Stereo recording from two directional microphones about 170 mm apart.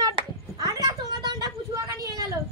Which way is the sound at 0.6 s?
25° right (ahead or behind).